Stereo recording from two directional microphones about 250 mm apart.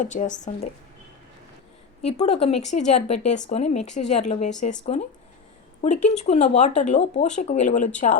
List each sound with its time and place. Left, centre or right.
0.0 s speech: left
2.0 s speech: left